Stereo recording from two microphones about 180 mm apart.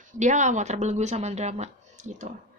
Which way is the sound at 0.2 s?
40° right (ahead or behind).